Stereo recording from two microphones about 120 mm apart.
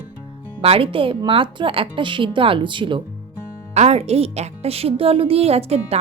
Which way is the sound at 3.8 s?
60° right (ahead or behind).